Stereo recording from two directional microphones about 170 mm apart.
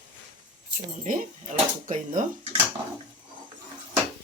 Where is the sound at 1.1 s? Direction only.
50° right (ahead or behind).